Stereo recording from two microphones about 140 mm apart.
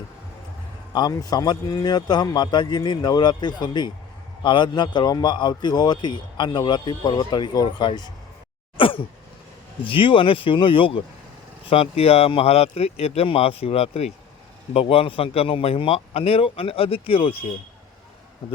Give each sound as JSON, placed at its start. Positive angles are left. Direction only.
{"t": 0.9, "sound": "a man's voice", "side_deg": 25}